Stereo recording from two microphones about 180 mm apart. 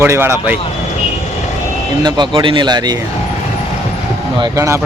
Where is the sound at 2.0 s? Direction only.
25° right (ahead or behind).